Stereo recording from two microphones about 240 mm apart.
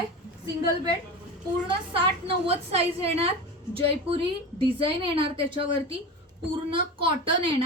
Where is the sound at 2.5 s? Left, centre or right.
Right.